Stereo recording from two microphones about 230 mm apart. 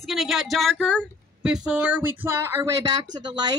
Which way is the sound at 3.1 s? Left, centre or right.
Centre.